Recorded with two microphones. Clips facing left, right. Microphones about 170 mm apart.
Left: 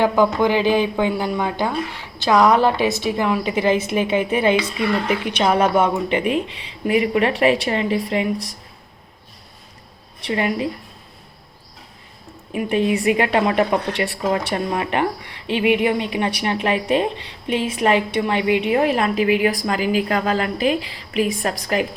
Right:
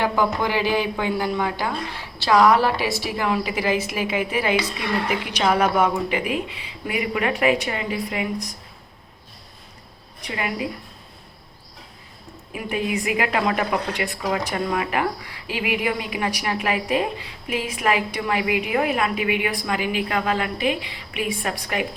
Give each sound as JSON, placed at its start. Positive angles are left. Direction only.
{"t": 0.0, "sound": "a woman's voice", "side_deg": 20}
{"t": 10.2, "sound": "a woman's voice", "side_deg": 30}
{"t": 12.7, "sound": "a woman's voice", "side_deg": 30}